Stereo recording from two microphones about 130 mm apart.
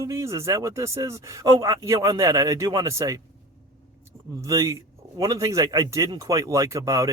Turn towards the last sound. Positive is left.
turn(degrees=-25)  # may be behind; listen again after turning